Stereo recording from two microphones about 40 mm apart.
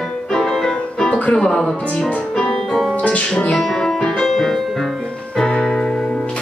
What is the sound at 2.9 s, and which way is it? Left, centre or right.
Music, left.